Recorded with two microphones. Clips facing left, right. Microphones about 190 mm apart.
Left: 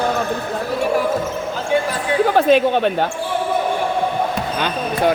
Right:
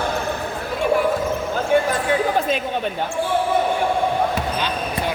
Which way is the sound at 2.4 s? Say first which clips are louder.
Left 8 dB; 75° left (ahead or behind).